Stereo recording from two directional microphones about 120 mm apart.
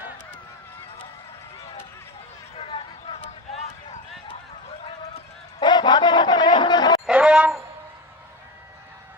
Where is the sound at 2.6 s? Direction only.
50° left (ahead or behind).